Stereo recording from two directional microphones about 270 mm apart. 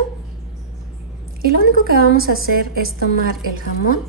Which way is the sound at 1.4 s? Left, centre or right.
Right.